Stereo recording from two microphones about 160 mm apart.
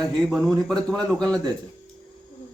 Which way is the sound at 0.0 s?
5° left (ahead or behind).